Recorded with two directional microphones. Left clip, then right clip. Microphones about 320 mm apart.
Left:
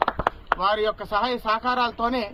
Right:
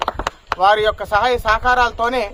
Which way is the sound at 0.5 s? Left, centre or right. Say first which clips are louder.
Right 9 dB; right.